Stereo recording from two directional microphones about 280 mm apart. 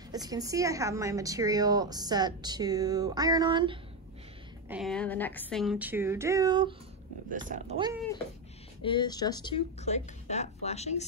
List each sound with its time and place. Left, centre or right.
0.1 s a woman's voice: centre
4.6 s speech: centre
7.2 s speech: right
8.8 s speech: centre